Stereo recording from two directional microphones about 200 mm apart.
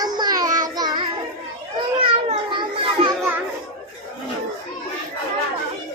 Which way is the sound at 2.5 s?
25° right (ahead or behind).